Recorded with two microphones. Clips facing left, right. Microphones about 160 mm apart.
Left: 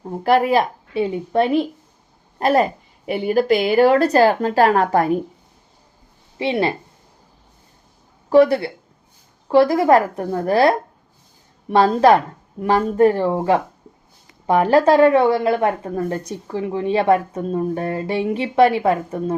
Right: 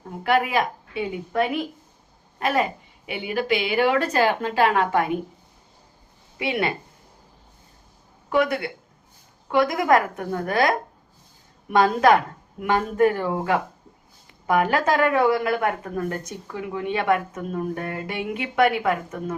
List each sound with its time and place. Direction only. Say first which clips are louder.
0.0 s a woman's voice: left 5 dB; 35° left (ahead or behind)
6.4 s speech: left 5 dB; 30° left (ahead or behind)
8.3 s a woman's voice: left 9 dB; 30° left (ahead or behind)